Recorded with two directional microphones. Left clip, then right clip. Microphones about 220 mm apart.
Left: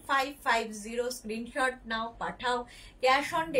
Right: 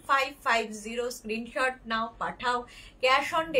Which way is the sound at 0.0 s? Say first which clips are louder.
Right 3 dB; 15° right (ahead or behind).